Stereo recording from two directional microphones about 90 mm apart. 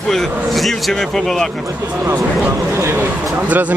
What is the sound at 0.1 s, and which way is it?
Speech, 5° left (ahead or behind).